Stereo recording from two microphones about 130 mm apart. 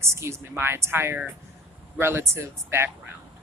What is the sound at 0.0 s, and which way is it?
A woman's voice, 20° right (ahead or behind).